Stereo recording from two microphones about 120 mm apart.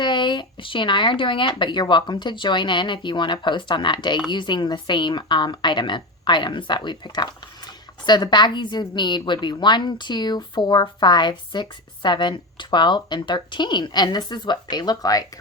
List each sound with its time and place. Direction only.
0.0 s a woman's voice: 40° left (ahead or behind)